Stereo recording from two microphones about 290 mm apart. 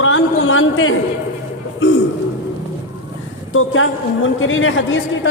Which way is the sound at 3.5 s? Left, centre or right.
Left.